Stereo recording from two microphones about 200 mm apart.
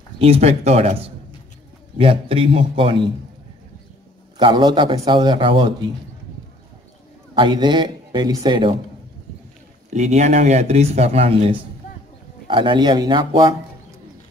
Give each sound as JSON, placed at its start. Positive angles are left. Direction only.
{"t": 0.2, "sound": "a man's voice", "side_deg": -30}
{"t": 4.4, "sound": "a man's voice", "side_deg": -20}
{"t": 7.3, "sound": "a man's voice", "side_deg": -20}
{"t": 9.9, "sound": "a man's voice", "side_deg": -35}